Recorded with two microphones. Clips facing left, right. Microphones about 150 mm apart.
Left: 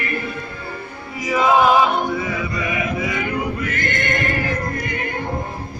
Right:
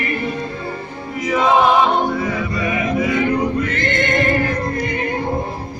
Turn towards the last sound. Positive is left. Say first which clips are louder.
# right 5 dB
turn(degrees=-25)  # may be behind; listen again after turning